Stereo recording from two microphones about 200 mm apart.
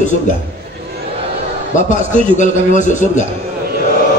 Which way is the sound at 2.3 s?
40° left (ahead or behind).